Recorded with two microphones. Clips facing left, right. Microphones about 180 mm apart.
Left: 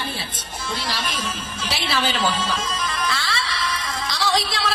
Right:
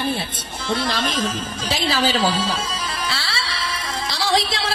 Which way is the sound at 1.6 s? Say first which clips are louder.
Right 3 dB; 40° right (ahead or behind).